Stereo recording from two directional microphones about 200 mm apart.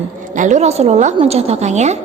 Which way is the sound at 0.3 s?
35° right (ahead or behind).